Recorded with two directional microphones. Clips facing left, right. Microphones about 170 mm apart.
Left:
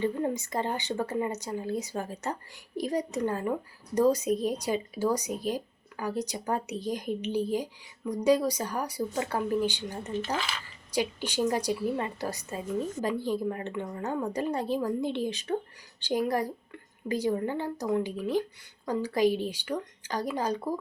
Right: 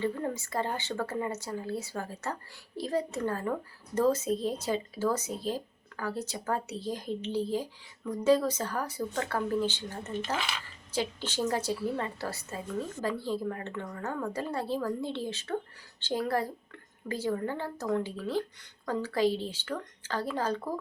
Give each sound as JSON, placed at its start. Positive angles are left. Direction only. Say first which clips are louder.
{"t": 0.0, "sound": "speech", "louder": "left 3 dB", "side_deg": 20}